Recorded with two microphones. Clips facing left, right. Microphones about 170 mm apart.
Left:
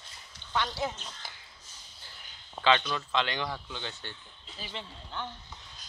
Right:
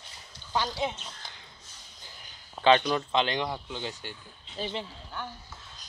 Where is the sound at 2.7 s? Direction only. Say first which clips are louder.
Right 6 dB; 40° right (ahead or behind).